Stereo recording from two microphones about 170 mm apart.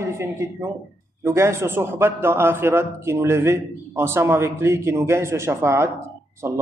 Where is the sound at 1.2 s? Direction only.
15° right (ahead or behind).